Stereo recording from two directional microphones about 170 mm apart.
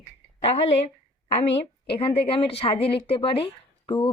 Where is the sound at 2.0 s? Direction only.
30° left (ahead or behind).